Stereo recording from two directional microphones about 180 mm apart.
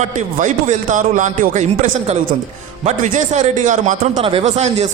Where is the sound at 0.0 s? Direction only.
45° right (ahead or behind).